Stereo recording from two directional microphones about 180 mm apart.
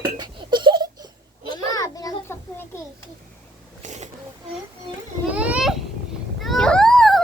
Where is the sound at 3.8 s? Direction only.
40° right (ahead or behind).